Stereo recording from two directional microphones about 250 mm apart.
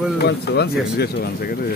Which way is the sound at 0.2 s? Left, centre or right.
Left.